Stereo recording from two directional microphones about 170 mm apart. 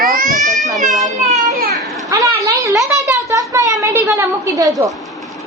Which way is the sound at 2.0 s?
20° right (ahead or behind).